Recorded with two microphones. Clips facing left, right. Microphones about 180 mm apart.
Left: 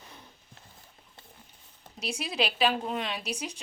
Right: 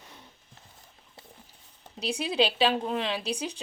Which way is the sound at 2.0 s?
30° right (ahead or behind).